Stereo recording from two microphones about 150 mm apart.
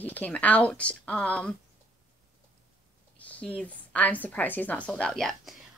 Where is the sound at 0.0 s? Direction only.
10° left (ahead or behind).